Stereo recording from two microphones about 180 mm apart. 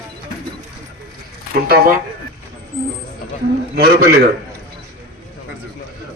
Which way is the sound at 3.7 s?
65° right (ahead or behind).